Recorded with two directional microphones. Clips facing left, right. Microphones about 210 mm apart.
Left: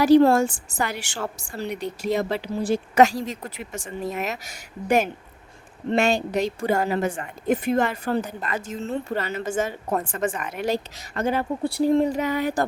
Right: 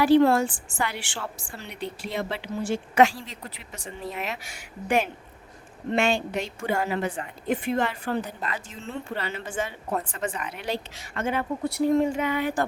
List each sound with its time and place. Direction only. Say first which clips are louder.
0.0 s a woman's voice: left 3 dB; 40° left (ahead or behind)